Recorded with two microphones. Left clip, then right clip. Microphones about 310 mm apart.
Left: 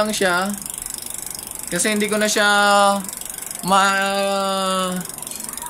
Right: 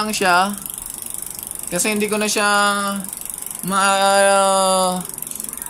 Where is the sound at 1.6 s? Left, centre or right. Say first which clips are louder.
Even; centre.